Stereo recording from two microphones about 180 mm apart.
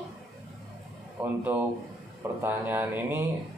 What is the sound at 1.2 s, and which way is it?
A man's voice, 10° right (ahead or behind).